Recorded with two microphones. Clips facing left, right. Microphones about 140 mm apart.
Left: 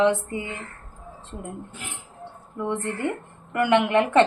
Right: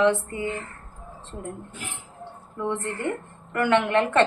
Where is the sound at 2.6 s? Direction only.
15° left (ahead or behind).